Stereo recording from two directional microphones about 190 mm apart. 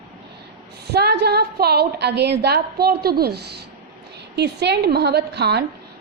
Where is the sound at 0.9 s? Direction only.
60° right (ahead or behind).